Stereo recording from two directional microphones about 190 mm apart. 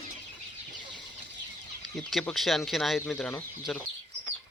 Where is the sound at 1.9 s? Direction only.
5° left (ahead or behind).